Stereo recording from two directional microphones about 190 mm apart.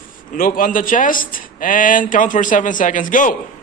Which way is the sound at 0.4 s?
45° left (ahead or behind).